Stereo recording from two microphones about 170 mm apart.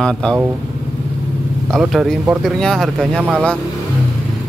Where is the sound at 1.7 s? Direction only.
Centre (ahead or behind).